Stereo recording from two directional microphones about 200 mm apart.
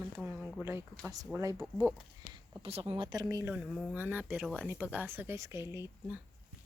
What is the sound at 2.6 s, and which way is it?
Speech, 30° right (ahead or behind).